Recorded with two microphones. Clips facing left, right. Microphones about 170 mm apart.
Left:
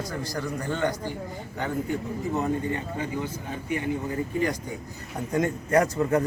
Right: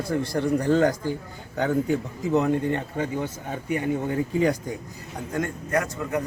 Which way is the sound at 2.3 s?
75° right (ahead or behind).